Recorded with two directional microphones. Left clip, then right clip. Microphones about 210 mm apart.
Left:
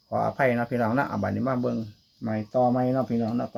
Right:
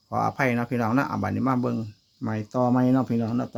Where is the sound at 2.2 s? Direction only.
45° right (ahead or behind).